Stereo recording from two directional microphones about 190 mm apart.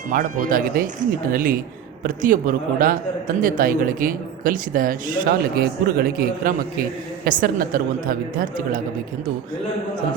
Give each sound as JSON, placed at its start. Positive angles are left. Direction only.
{"t": 0.1, "sound": "speech", "side_deg": -45}